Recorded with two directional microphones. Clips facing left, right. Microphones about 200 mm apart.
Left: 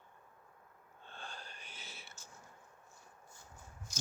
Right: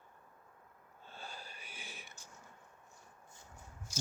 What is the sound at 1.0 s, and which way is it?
Whispering, 5° right (ahead or behind).